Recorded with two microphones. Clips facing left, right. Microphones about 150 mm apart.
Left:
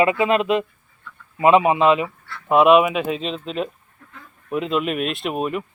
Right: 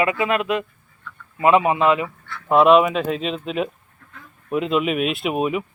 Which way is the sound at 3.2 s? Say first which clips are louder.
Right 2 dB; 5° right (ahead or behind).